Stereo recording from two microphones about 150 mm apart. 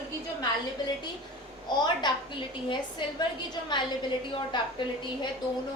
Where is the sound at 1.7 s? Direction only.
30° left (ahead or behind).